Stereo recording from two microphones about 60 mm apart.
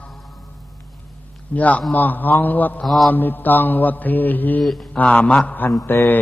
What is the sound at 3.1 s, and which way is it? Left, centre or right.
Mantra, left.